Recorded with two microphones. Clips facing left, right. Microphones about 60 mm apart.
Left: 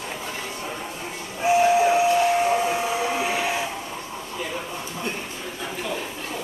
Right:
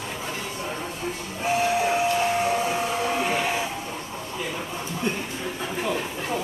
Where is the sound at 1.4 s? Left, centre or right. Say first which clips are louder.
Left 5 dB; centre.